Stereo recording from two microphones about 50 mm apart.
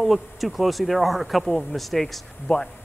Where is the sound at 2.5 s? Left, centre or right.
Left.